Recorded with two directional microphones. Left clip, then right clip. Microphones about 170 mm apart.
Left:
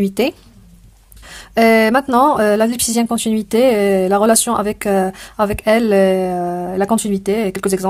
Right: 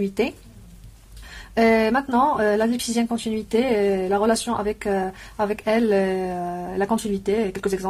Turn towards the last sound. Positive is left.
turn(degrees=50)  # may be behind; listen again after turning